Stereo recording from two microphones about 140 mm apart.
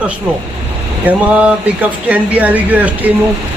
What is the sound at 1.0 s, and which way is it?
Speech, 10° right (ahead or behind).